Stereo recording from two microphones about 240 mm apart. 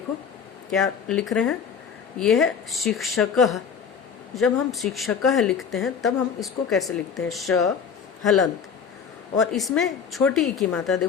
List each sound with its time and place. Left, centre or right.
0.7 s speech: centre